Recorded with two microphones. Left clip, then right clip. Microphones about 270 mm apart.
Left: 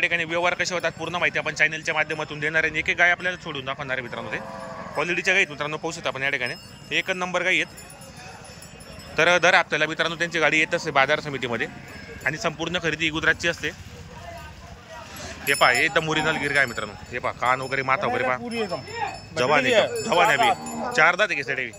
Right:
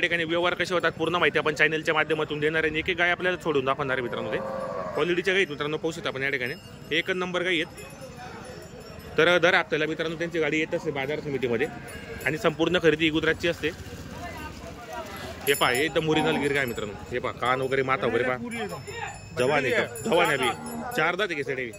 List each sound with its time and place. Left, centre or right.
0.0 s speech: centre
9.1 s speech: centre
15.4 s speech: centre
19.6 s speech: left
20.1 s speech: centre